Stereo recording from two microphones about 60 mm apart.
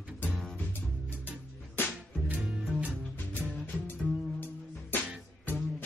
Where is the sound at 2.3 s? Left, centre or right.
Centre.